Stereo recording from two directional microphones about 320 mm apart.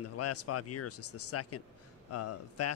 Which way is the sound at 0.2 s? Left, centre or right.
Left.